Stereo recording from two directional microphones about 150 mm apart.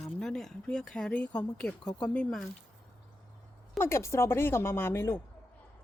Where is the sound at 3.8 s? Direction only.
20° left (ahead or behind).